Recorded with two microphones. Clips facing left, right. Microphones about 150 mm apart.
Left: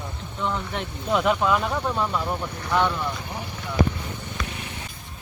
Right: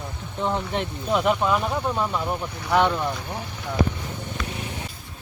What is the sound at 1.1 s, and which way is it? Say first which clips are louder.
Speech: even; 5° right (ahead or behind).